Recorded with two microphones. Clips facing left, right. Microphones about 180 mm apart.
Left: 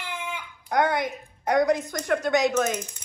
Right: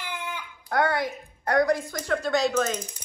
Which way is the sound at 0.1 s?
15° left (ahead or behind).